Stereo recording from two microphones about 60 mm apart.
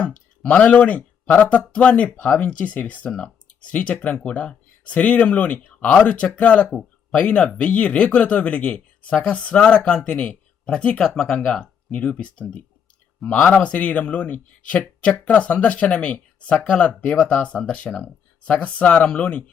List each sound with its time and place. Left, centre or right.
0.0 s speech: left